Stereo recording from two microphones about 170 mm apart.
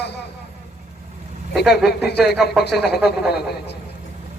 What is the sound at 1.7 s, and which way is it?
A man's voice, 70° left (ahead or behind).